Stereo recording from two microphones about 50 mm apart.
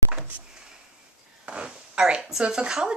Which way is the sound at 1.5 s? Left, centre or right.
Centre.